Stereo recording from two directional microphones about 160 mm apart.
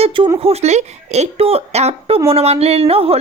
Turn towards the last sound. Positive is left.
turn(degrees=-40)  # may be behind; listen again after turning